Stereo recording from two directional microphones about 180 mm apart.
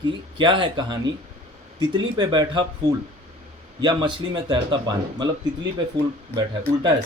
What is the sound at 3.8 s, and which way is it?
Speech, 25° right (ahead or behind).